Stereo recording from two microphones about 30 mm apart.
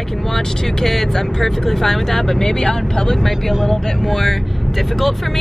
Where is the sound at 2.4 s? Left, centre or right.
Left.